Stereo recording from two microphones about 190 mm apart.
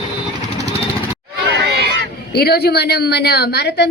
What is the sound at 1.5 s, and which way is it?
Crowd, 65° right (ahead or behind).